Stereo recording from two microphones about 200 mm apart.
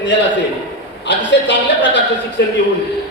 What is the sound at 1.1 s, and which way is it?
A man's voice, 60° left (ahead or behind).